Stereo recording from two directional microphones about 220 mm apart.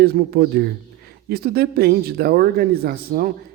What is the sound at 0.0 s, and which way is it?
A man's voice, 45° right (ahead or behind).